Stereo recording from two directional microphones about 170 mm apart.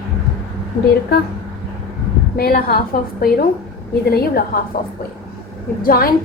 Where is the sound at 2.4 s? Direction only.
65° left (ahead or behind).